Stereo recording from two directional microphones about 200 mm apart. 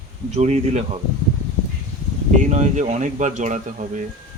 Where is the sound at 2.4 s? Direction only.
35° right (ahead or behind).